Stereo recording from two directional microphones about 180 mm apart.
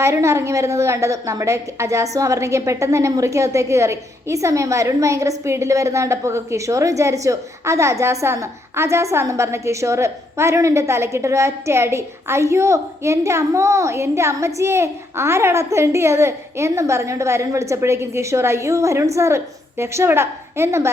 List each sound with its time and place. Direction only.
0.0 s a woman's voice: 15° right (ahead or behind)